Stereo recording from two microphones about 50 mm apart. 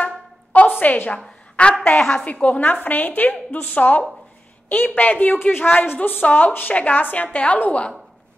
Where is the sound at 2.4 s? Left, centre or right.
Left.